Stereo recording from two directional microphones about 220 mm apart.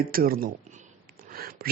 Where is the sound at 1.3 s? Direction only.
45° right (ahead or behind).